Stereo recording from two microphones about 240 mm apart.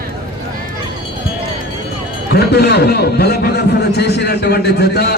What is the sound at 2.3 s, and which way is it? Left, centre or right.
A man's voice, left.